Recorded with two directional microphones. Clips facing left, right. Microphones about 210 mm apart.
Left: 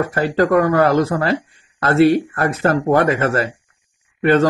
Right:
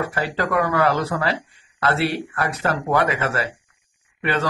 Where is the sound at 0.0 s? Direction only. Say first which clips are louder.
Left 7 dB; 45° left (ahead or behind).